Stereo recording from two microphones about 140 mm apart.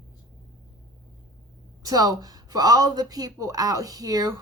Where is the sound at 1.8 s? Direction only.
25° right (ahead or behind).